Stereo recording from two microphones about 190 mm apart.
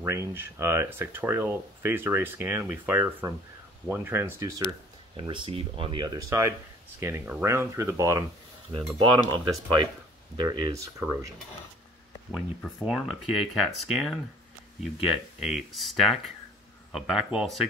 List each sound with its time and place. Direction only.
0.0 s speech: 15° right (ahead or behind)
5.1 s speech: 25° right (ahead or behind)
8.9 s speech: 25° right (ahead or behind)
12.6 s speech: centre (ahead or behind)
15.4 s speech: centre (ahead or behind)